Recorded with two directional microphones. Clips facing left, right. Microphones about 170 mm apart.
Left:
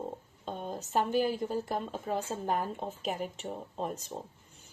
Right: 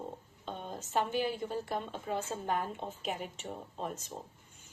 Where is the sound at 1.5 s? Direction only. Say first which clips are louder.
Left 3 dB; 45° left (ahead or behind).